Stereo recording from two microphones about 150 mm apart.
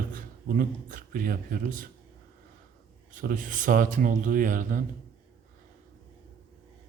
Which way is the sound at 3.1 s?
60° right (ahead or behind).